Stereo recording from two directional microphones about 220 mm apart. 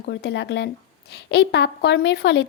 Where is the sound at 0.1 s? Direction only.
50° left (ahead or behind).